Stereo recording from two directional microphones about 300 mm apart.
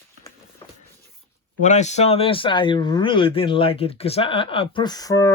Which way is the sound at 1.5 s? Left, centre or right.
Left.